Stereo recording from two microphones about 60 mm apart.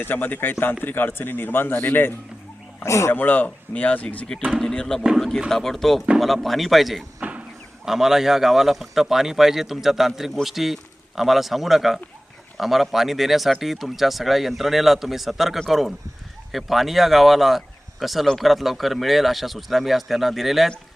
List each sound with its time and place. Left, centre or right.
0.0 s a man's voice: left
2.8 s speech: left
3.1 s speech: left
4.6 s speech: centre
7.2 s vehicle: right
7.9 s speech: centre